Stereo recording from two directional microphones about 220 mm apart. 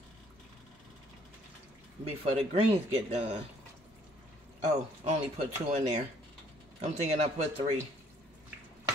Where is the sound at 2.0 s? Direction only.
30° right (ahead or behind).